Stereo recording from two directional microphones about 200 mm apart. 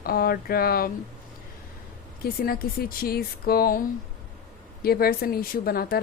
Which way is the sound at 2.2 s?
50° left (ahead or behind).